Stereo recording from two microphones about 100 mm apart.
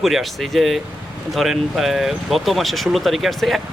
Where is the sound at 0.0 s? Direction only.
Centre (ahead or behind).